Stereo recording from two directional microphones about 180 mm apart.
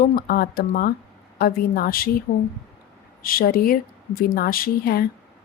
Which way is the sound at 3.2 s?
55° left (ahead or behind).